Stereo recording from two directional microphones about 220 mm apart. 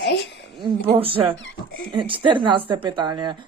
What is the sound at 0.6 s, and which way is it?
Speech, 25° right (ahead or behind).